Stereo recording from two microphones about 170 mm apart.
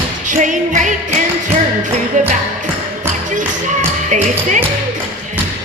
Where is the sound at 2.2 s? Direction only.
50° right (ahead or behind).